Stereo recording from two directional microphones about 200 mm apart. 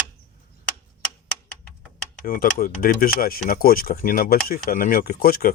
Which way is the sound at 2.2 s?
45° left (ahead or behind).